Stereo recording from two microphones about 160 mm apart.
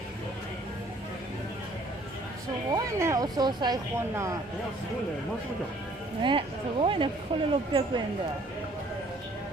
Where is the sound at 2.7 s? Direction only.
20° right (ahead or behind).